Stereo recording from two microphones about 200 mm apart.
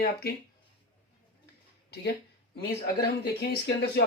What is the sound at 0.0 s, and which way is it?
Speech, 50° left (ahead or behind).